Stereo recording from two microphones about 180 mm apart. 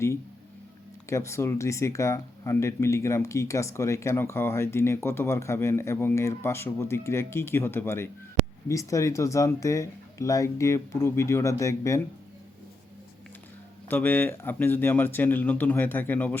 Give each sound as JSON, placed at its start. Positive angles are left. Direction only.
{"t": 1.1, "sound": "speech", "side_deg": 15}
{"t": 13.8, "sound": "speech", "side_deg": 10}